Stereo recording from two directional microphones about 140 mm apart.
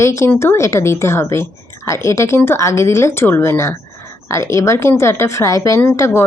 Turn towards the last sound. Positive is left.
turn(degrees=20)  # may be behind; listen again after turning